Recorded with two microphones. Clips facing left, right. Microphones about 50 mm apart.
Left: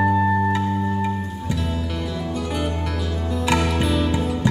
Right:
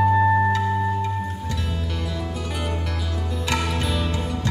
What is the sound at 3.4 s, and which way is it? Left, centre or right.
Music, centre.